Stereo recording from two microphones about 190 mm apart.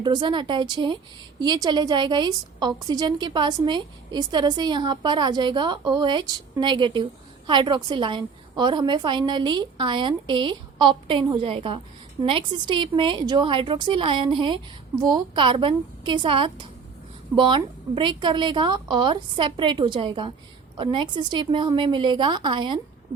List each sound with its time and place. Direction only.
0.0 s a woman's voice: 25° right (ahead or behind)